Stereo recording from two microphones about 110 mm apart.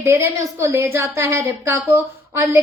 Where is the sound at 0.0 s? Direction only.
25° right (ahead or behind).